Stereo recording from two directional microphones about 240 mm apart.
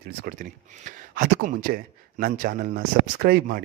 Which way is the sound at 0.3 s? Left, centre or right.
Right.